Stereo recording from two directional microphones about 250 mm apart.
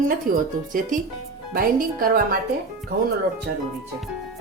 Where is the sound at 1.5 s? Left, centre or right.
Right.